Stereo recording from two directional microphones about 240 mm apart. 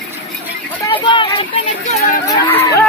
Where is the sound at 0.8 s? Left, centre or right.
Centre.